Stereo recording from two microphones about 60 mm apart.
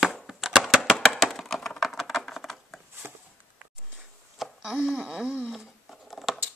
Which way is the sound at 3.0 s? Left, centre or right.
Right.